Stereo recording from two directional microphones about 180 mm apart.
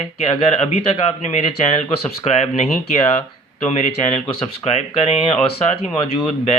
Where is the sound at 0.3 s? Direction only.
35° left (ahead or behind).